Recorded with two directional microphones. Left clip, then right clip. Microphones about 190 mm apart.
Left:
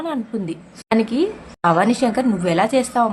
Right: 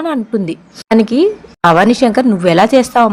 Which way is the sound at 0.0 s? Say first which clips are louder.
Right 8 dB; 40° right (ahead or behind).